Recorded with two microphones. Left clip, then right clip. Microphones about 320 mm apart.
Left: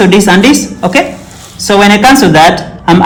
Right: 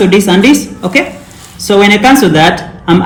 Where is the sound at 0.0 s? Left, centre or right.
Left.